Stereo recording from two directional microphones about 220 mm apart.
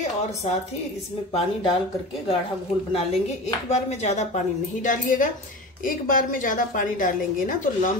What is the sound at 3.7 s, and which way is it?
A woman's voice, 30° left (ahead or behind).